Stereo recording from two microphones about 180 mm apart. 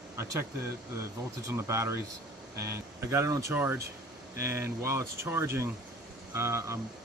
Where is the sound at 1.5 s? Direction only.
15° right (ahead or behind).